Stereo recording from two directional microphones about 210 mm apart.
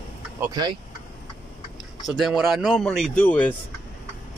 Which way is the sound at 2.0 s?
Centre (ahead or behind).